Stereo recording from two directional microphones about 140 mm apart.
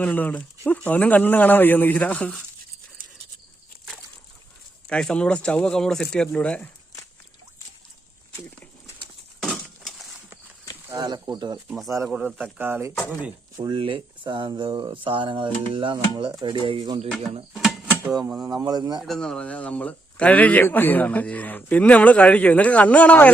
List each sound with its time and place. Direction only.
0.0 s speech: 10° left (ahead or behind)
4.9 s speech: 5° left (ahead or behind)
9.4 s crushing: 5° left (ahead or behind)
10.9 s speech: 30° right (ahead or behind)
12.0 s a man's voice: 5° right (ahead or behind)
13.6 s speech: 35° right (ahead or behind)
17.5 s mechanisms: 5° right (ahead or behind)
18.3 s speech: 25° right (ahead or behind)
19.0 s speech: 5° left (ahead or behind)